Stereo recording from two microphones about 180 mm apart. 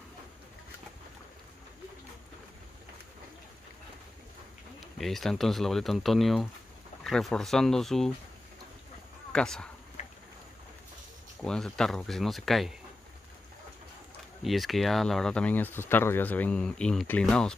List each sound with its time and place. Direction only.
4.7 s speech: centre (ahead or behind)
9.3 s speech: 5° left (ahead or behind)
10.0 s boat: 40° left (ahead or behind)
11.4 s speech: 5° left (ahead or behind)
14.4 s speech: centre (ahead or behind)